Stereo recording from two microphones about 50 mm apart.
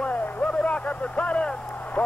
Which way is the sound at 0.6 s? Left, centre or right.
Left.